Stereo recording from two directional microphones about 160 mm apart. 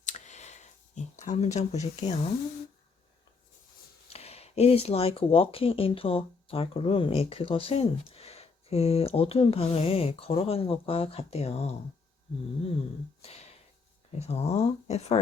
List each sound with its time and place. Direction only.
0.0 s clicking: 45° left (ahead or behind)
1.2 s speech: 45° left (ahead or behind)
4.1 s speech: 40° left (ahead or behind)
13.2 s a sound: 40° left (ahead or behind)
14.2 s speech: 40° left (ahead or behind)